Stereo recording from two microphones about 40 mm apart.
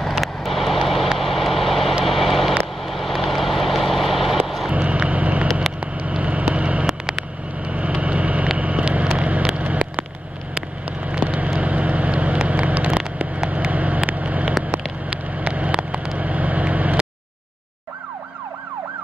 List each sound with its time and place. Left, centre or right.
0.0 s vehicle: centre
4.7 s vehicle: right
6.9 s vehicle: centre
7.6 s vehicle: right